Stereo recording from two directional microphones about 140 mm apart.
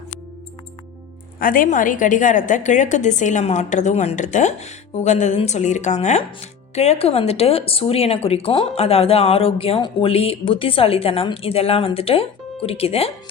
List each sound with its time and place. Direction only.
1.4 s a woman's voice: 80° left; by 13.1 s 45° left (ahead or behind)